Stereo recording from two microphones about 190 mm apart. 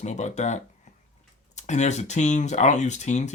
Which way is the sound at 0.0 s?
35° left (ahead or behind).